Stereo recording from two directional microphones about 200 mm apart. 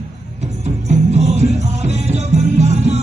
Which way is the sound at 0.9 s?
35° right (ahead or behind).